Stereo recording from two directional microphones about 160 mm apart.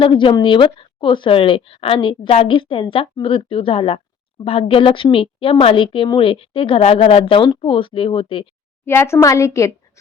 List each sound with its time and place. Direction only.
0.0 s a woman's voice: 30° left (ahead or behind)
8.8 s a woman's voice: 15° left (ahead or behind)